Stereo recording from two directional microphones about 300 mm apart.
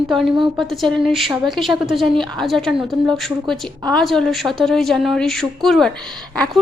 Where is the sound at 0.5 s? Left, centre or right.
Centre.